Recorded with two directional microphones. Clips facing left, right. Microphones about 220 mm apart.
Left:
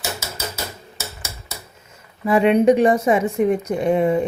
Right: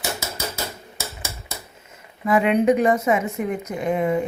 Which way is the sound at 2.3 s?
30° left (ahead or behind).